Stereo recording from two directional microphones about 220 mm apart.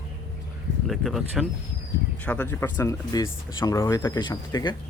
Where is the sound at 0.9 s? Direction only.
Centre (ahead or behind); by 4.7 s 15° left (ahead or behind).